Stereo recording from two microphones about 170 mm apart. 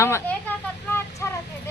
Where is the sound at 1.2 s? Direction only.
15° left (ahead or behind).